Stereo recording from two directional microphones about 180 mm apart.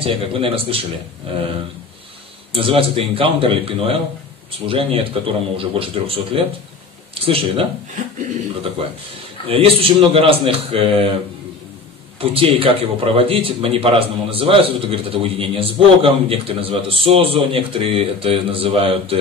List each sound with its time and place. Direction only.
0.0 s a man's voice: 30° right (ahead or behind)
2.5 s a man's voice: 30° right (ahead or behind)
9.5 s a man's voice: 30° right (ahead or behind)
12.2 s a man's voice: 30° right (ahead or behind)